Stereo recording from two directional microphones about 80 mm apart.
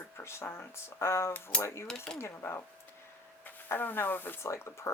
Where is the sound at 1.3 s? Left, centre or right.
Left.